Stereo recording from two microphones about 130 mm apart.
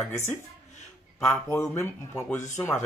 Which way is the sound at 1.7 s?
20° left (ahead or behind).